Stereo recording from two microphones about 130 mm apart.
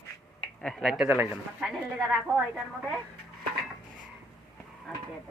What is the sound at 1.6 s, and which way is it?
A woman's voice, 5° right (ahead or behind).